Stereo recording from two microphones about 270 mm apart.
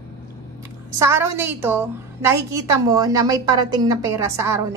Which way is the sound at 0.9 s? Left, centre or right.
Centre.